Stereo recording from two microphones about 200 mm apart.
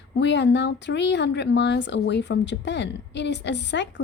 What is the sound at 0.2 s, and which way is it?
Speech, 60° left (ahead or behind).